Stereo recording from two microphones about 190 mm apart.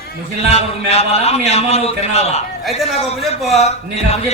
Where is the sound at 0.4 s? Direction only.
35° left (ahead or behind).